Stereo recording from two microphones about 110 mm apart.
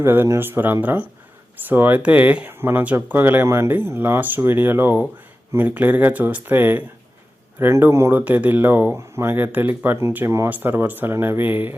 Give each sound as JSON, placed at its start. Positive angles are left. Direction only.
{"t": 0.0, "sound": "speech", "side_deg": -20}